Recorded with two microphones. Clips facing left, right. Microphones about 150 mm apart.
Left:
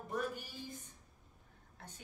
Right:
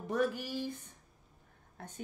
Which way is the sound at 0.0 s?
85° right.